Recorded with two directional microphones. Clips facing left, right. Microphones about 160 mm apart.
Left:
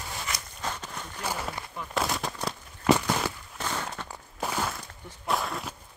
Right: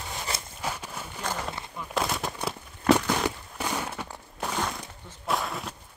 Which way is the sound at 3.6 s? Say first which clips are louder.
Right 2 dB; 10° right (ahead or behind).